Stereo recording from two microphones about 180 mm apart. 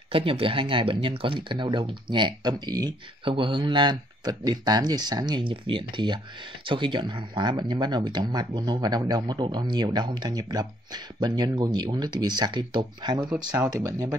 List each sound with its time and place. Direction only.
0.1 s speech: 30° right (ahead or behind)